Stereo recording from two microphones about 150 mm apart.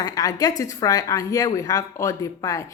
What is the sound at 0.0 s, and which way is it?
A woman's voice, 25° left (ahead or behind).